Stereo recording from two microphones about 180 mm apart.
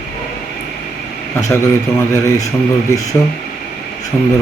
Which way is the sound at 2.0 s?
15° left (ahead or behind).